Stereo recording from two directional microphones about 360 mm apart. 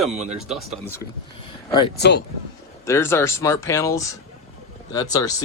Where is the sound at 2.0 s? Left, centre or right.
Left.